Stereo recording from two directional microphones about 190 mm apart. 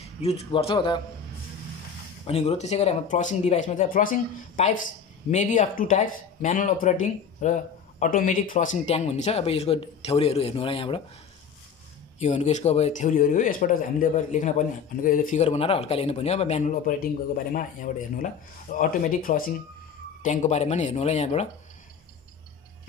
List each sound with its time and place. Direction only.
0.2 s a man's voice: 30° left (ahead or behind)
2.2 s speech: 35° left (ahead or behind)
12.2 s speech: 35° left (ahead or behind)
18.2 s speech: 45° left (ahead or behind)